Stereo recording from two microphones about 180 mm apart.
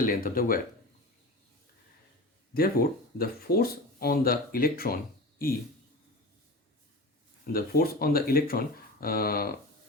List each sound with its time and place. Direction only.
0.0 s speech: 50° left (ahead or behind)
2.5 s speech: 55° left (ahead or behind)
7.5 s speech: 55° left (ahead or behind)